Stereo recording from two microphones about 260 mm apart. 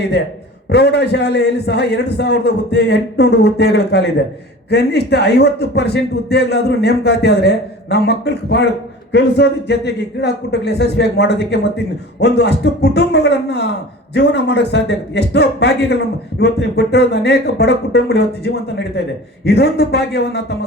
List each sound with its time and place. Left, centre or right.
0.7 s a man's voice: left